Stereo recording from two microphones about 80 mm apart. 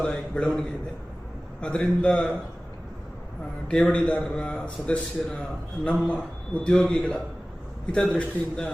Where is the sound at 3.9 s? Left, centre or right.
Centre.